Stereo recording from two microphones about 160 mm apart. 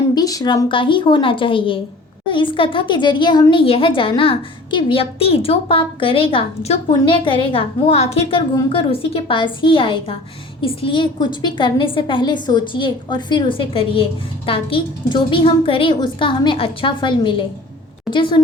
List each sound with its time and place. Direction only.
0.1 s a woman's voice: 25° left (ahead or behind)